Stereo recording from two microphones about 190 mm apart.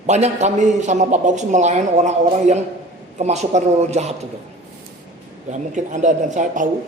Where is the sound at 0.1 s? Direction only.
35° right (ahead or behind).